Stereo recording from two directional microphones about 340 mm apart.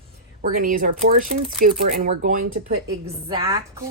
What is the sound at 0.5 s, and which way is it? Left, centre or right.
Speech, right.